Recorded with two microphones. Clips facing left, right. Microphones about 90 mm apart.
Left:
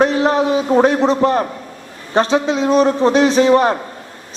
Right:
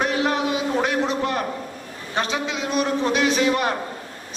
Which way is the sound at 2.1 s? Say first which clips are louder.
Left 10 dB; 35° left (ahead or behind).